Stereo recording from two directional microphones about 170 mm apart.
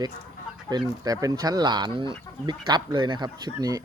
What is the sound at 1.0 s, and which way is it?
Speech, 20° right (ahead or behind).